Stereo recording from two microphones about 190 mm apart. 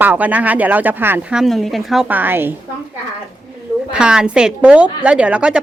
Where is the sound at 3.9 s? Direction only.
5° right (ahead or behind).